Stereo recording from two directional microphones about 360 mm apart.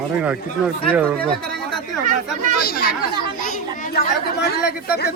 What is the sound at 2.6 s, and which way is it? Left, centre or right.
Speech, left.